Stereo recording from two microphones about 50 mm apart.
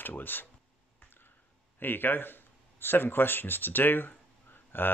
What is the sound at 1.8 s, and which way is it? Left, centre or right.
Speech, left.